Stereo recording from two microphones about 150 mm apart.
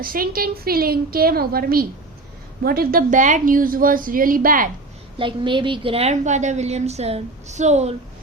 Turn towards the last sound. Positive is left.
turn(degrees=-50)  # may be behind; listen again after turning